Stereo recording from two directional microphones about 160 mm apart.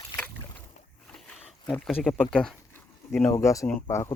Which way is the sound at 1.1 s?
5° left (ahead or behind).